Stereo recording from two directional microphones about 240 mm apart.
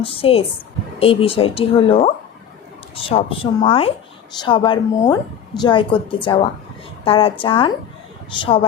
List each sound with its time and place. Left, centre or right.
0.0 s a woman's voice: left